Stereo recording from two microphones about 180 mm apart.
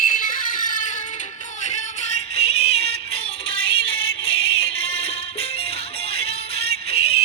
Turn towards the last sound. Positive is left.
turn(degrees=35)  # may be behind; listen again after turning